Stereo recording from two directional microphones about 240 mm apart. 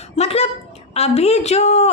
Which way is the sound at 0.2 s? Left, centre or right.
Left.